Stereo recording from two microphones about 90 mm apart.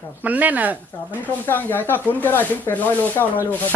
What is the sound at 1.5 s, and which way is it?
Speech, 20° left (ahead or behind).